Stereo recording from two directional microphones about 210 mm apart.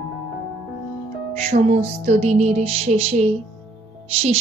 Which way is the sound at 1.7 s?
30° right (ahead or behind).